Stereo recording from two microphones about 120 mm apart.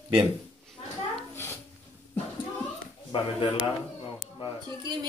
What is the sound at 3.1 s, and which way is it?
Speech, 40° left (ahead or behind).